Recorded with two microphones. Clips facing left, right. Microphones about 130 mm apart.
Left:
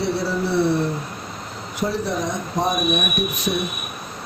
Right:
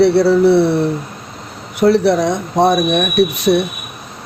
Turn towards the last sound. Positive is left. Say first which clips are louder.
# right 11 dB
turn(degrees=-75)  # may be behind; listen again after turning